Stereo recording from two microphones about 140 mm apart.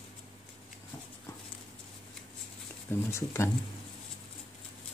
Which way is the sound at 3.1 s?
20° left (ahead or behind).